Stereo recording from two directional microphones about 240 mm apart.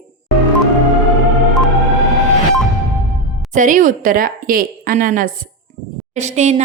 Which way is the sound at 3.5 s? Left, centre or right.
Right.